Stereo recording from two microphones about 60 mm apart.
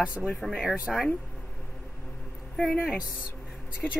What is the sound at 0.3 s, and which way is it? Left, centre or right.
Speech, centre.